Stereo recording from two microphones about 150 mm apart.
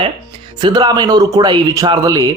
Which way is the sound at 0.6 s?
25° right (ahead or behind).